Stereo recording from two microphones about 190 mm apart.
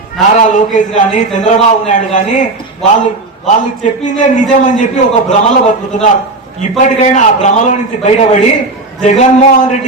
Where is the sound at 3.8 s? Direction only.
40° left (ahead or behind).